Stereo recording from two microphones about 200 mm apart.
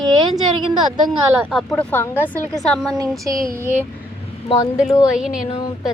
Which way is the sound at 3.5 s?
10° right (ahead or behind).